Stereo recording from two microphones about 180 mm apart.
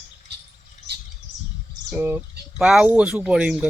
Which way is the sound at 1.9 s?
10° right (ahead or behind).